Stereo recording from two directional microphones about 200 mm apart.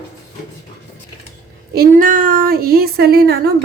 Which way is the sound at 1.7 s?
45° right (ahead or behind).